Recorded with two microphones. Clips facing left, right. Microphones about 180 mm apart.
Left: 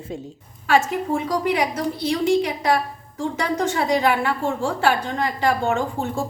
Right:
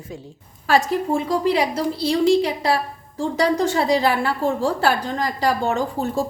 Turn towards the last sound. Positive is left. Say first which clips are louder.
# right 1 dB
turn(degrees=-35)  # may be behind; listen again after turning